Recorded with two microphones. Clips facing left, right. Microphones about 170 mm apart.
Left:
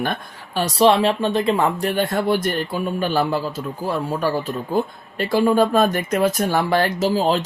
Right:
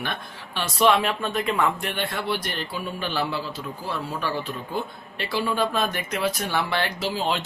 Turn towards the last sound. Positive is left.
turn(degrees=40)  # may be behind; listen again after turning